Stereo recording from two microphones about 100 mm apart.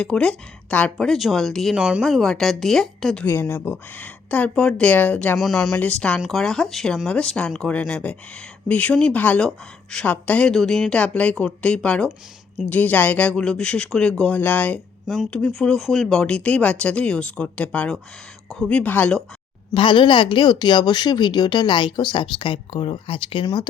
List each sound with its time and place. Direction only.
0.0 s speech: 10° left (ahead or behind)
1.7 s speech: 10° right (ahead or behind)
2.0 s speech: 5° left (ahead or behind)
3.2 s speech: 20° left (ahead or behind)
5.4 s speech: centre (ahead or behind)
15.0 s speech: centre (ahead or behind)
19.7 s speech: 55° left (ahead or behind)